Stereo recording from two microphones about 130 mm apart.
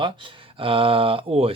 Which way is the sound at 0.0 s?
40° right (ahead or behind).